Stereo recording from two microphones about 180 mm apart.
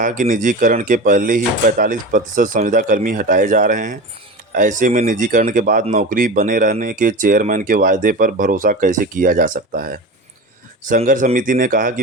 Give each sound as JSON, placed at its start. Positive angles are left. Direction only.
{"t": 0.0, "sound": "speech", "side_deg": -45}